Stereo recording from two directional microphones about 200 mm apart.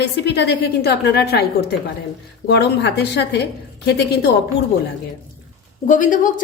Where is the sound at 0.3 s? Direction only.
55° left (ahead or behind).